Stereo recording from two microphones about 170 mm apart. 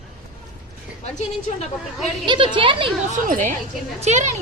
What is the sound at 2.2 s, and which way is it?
Speech, 30° right (ahead or behind).